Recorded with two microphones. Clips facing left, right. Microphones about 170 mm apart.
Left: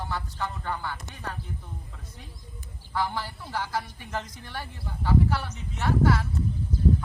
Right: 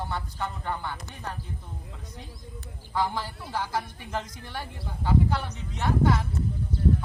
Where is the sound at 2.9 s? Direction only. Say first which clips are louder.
Right 1 dB; 15° right (ahead or behind).